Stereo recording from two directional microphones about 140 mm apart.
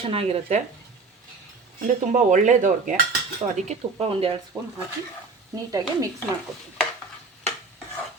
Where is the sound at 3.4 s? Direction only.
50° right (ahead or behind).